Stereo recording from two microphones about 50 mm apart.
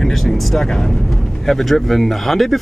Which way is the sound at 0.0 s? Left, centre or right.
Centre.